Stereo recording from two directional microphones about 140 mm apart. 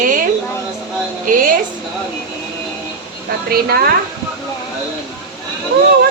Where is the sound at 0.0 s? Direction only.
75° right (ahead or behind).